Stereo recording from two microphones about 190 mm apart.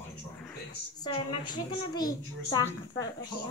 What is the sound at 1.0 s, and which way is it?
A woman's voice, 20° left (ahead or behind).